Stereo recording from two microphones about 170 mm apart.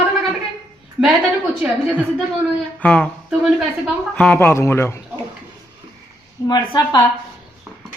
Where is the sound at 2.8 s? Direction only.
5° left (ahead or behind).